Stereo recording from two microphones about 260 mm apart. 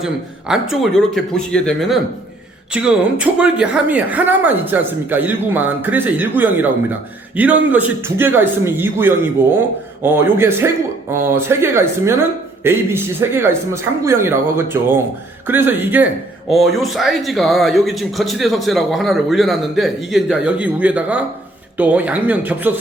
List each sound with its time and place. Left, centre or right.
0.0 s a man's voice: centre